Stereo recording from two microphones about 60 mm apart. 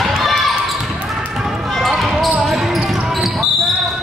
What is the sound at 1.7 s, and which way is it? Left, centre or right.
Basketball bounce, centre.